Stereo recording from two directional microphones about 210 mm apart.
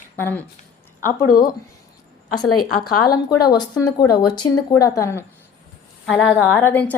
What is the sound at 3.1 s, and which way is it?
Speech, 20° left (ahead or behind).